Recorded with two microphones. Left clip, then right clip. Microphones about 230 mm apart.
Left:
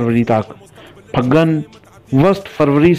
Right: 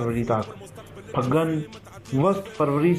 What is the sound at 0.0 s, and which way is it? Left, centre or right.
A man's voice, left.